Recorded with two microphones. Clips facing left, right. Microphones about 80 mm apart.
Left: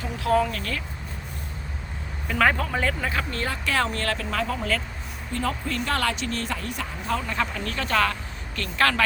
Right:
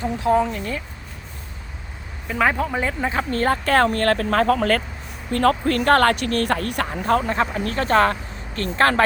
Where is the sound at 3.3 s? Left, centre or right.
Right.